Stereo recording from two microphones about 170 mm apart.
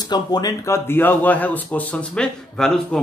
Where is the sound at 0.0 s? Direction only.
25° left (ahead or behind).